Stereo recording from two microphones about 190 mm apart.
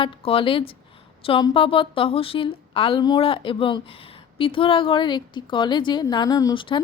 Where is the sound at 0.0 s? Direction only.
30° left (ahead or behind).